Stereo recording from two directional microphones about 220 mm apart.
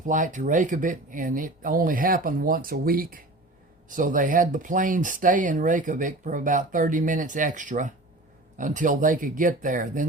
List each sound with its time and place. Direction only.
0.0 s speech: 35° right (ahead or behind)